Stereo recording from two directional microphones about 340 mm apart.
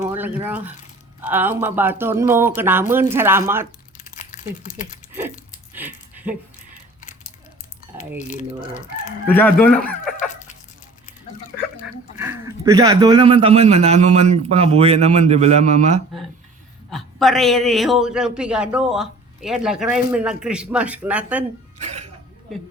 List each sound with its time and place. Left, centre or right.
0.0 s speech: centre
3.9 s crumpling: left
5.7 s a sound: centre
8.3 s speech: left
9.3 s speech: centre
11.8 s a man's voice: centre
16.9 s a man's voice: centre